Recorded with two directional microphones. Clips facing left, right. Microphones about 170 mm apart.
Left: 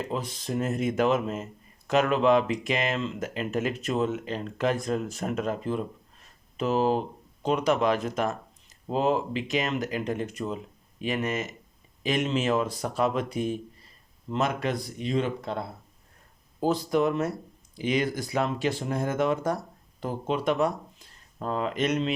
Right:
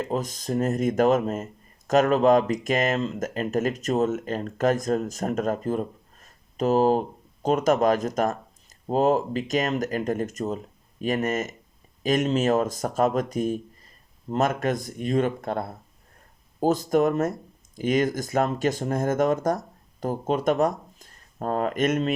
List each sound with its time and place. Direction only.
0.0 s speech: 45° right (ahead or behind)